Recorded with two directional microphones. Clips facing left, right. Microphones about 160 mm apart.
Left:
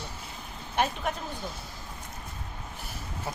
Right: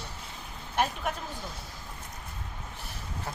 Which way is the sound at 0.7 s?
5° right (ahead or behind).